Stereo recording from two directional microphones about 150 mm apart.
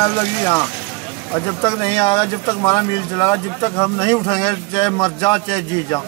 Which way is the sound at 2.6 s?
30° left (ahead or behind).